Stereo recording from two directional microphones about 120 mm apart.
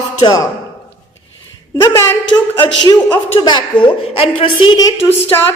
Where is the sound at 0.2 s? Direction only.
35° left (ahead or behind).